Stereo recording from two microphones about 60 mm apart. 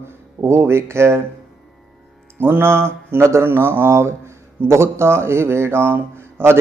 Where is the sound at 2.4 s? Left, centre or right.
Right.